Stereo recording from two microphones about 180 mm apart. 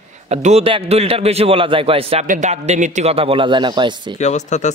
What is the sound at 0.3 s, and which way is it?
Speech, 35° right (ahead or behind).